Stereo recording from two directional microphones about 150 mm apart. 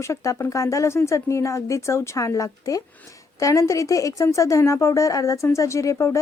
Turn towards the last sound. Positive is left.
turn(degrees=20)  # may be behind; listen again after turning